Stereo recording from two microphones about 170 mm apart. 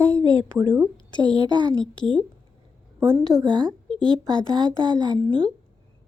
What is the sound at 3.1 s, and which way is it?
Speech, 20° right (ahead or behind).